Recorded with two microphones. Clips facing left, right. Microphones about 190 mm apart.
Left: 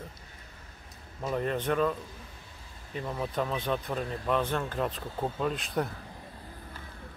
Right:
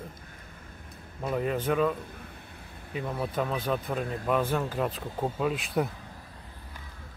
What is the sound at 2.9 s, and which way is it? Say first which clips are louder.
Speech: right 1 dB; 5° right (ahead or behind).